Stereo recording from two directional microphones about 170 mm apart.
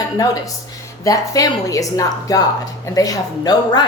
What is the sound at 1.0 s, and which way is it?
Speech, 20° left (ahead or behind).